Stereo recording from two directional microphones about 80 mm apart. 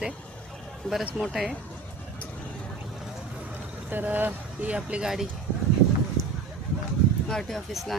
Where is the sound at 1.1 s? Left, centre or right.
Centre.